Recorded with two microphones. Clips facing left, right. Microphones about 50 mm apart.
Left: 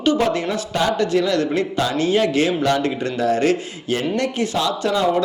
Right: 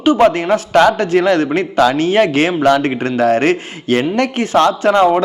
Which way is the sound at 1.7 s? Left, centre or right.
Right.